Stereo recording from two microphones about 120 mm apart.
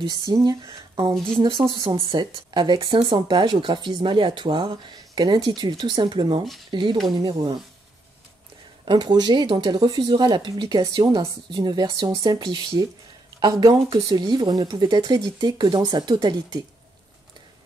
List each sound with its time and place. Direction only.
0.3 s speech: 35° right (ahead or behind)
8.8 s speech: 35° right (ahead or behind)